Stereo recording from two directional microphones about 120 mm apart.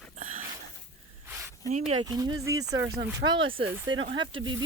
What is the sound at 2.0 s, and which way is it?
Speech, 35° right (ahead or behind).